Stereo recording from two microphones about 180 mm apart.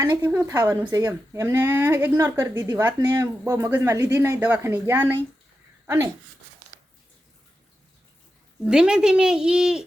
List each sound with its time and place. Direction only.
0.0 s speech: 10° right (ahead or behind)
8.6 s speech: 5° right (ahead or behind)